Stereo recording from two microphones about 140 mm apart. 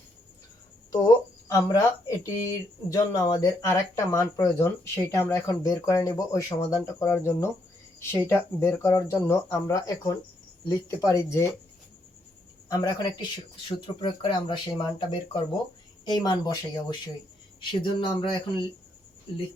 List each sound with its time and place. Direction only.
0.9 s speech: 25° left (ahead or behind)
12.6 s speech: 25° left (ahead or behind)